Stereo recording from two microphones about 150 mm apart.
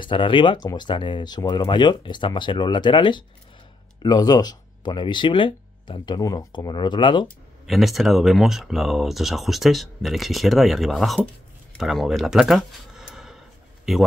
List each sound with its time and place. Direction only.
0.0 s speech: 35° left (ahead or behind)
7.6 s speech: centre (ahead or behind)